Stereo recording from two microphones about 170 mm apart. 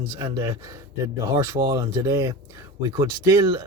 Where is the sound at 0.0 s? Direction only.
20° right (ahead or behind).